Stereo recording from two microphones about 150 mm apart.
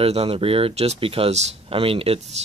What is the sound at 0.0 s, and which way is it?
Speech, 40° right (ahead or behind).